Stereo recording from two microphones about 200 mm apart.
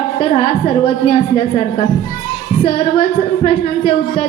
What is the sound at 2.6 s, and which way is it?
A woman's voice, 25° left (ahead or behind).